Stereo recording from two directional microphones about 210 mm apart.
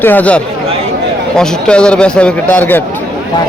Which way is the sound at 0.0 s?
10° left (ahead or behind).